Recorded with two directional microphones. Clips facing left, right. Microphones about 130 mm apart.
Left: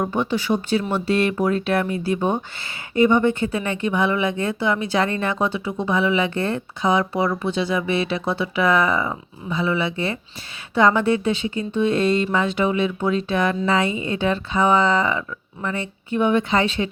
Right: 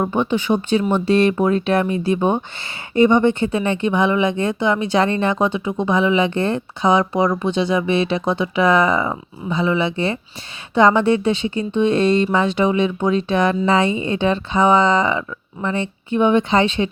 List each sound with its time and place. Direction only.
0.1 s speech: 15° right (ahead or behind)